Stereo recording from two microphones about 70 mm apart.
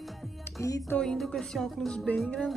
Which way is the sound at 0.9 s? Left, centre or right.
Centre.